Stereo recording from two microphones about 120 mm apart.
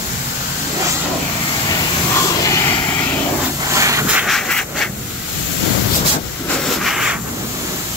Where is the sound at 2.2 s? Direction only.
25° left (ahead or behind).